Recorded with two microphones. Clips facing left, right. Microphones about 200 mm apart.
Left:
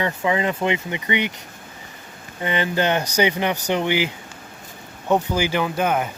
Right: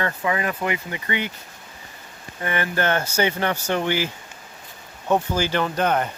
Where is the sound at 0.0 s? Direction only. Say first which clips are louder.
Left 3 dB; 20° left (ahead or behind).